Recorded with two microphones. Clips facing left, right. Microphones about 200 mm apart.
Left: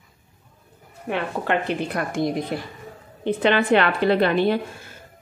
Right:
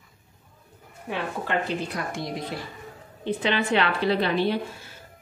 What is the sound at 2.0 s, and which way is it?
A woman's voice, 50° left (ahead or behind).